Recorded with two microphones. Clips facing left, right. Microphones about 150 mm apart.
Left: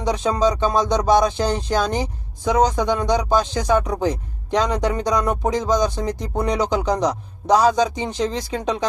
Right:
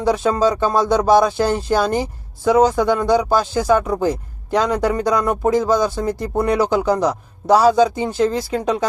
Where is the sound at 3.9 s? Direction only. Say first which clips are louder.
Right 3 dB; 10° right (ahead or behind).